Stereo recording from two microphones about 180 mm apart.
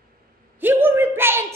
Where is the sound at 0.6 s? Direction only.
10° right (ahead or behind).